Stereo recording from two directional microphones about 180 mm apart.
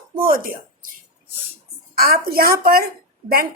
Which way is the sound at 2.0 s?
55° right (ahead or behind).